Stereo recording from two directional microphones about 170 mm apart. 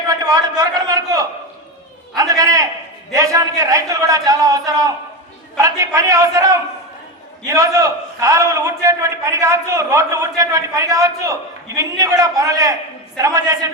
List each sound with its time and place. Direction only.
0.1 s a man's voice: 20° right (ahead or behind)